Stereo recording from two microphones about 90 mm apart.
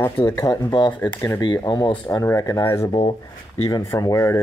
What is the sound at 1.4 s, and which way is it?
Speech, 50° left (ahead or behind).